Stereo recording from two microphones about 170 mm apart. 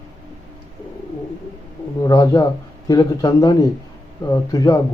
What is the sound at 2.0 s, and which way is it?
Speech, 25° left (ahead or behind).